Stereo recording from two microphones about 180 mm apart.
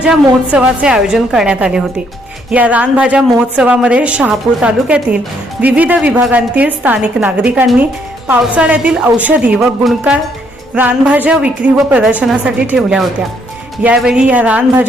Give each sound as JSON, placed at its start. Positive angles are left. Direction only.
{"t": 0.5, "sound": "a woman's voice", "side_deg": -5}